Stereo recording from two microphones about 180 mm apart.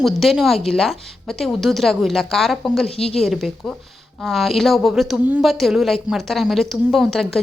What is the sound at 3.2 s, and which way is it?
Speech, centre (ahead or behind).